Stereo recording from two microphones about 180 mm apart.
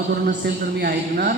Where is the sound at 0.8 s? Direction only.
55° right (ahead or behind).